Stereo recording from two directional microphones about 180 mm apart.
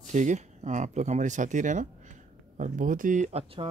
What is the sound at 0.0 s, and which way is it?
Speech, 40° right (ahead or behind).